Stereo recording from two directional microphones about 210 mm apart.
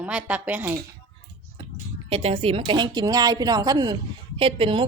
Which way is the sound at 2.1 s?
25° right (ahead or behind).